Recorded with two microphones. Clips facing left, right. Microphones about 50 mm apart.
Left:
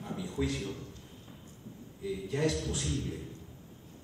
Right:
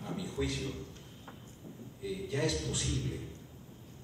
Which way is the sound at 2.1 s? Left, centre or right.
Left.